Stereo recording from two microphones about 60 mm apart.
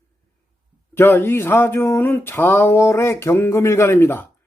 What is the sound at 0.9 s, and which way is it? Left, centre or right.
Speech, left.